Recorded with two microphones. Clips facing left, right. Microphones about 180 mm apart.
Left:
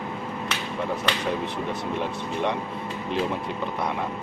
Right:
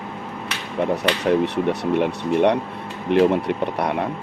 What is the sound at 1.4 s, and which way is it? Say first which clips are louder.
Speech: right 8 dB; 70° right (ahead or behind).